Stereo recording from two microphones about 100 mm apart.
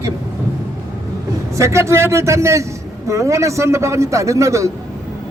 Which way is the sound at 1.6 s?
30° right (ahead or behind).